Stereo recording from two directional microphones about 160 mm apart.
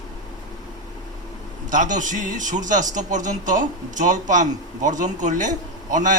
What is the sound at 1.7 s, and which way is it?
A man's voice, 55° right (ahead or behind).